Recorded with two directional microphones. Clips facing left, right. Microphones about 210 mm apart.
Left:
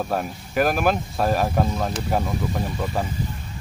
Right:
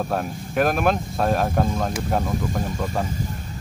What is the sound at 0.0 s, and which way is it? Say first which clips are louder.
Speech: even; centre (ahead or behind).